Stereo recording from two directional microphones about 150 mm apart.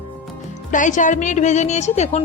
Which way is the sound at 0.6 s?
60° left (ahead or behind).